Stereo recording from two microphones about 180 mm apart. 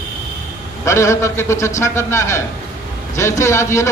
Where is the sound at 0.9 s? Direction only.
15° left (ahead or behind).